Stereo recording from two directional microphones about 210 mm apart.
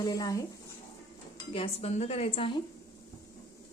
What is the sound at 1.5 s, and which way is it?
A woman's voice, 30° left (ahead or behind).